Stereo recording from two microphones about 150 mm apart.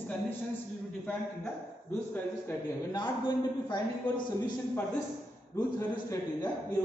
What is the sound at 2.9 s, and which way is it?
A man's voice, 30° left (ahead or behind).